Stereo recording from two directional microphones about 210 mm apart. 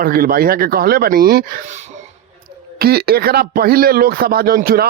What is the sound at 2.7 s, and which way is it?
Speech, 50° right (ahead or behind).